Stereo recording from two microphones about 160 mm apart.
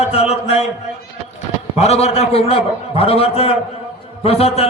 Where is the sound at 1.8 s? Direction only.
40° left (ahead or behind).